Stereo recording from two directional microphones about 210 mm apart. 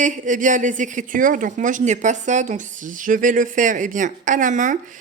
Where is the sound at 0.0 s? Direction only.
35° right (ahead or behind).